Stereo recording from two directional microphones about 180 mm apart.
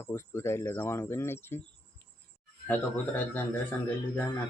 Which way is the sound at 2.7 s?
10° left (ahead or behind).